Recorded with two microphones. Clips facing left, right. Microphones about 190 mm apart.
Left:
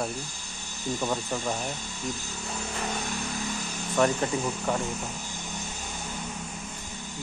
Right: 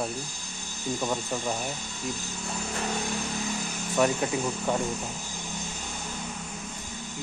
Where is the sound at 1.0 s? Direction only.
5° right (ahead or behind).